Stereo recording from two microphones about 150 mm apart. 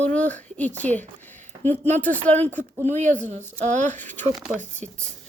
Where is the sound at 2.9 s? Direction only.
55° right (ahead or behind).